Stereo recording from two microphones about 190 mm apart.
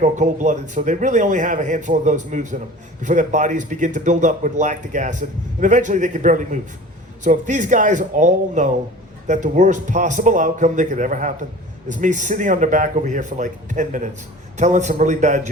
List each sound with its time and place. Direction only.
0.0 s speech: 40° right (ahead or behind)